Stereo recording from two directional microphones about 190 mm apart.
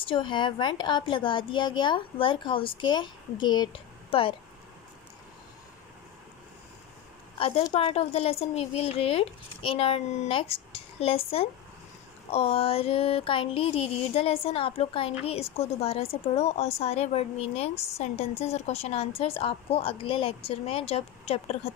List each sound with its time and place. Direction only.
0.0 s a woman's voice: 25° left (ahead or behind)
7.3 s a woman's voice: 30° left (ahead or behind)
7.6 s a sound: 30° left (ahead or behind)